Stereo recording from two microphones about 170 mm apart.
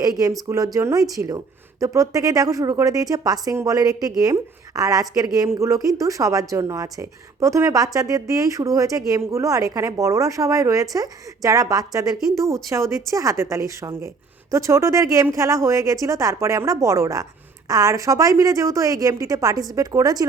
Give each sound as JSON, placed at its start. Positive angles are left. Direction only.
{"t": 0.4, "sound": "a woman's voice", "side_deg": -20}